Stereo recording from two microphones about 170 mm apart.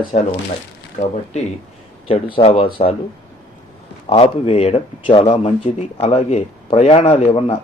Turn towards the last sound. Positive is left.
turn(degrees=35)  # may be behind; listen again after turning